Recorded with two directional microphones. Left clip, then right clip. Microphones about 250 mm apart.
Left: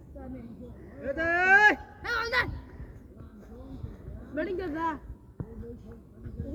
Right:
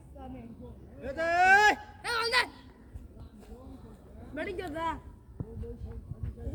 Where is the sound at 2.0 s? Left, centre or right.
Centre.